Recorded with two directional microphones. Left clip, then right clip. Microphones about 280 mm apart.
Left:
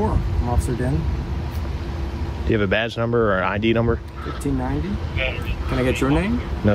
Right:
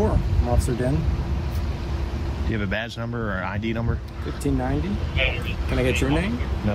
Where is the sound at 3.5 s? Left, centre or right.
Left.